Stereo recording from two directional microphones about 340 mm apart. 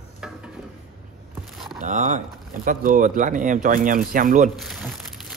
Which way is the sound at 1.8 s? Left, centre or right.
Right.